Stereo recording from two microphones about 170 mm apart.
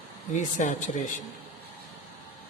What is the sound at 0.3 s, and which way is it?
Speech, 50° left (ahead or behind).